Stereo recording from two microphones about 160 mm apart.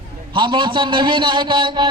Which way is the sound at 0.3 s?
30° right (ahead or behind).